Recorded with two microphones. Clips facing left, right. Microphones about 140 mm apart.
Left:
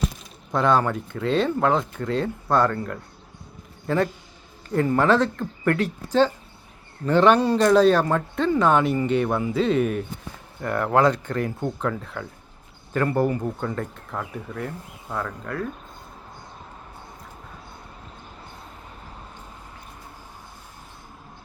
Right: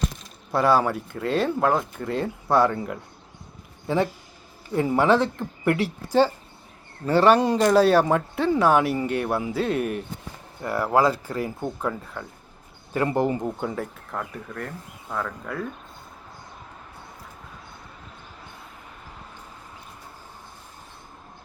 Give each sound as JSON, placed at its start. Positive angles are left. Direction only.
{"t": 0.5, "sound": "speech", "side_deg": -5}
{"t": 12.9, "sound": "speech", "side_deg": -15}
{"t": 13.7, "sound": "speech", "side_deg": 0}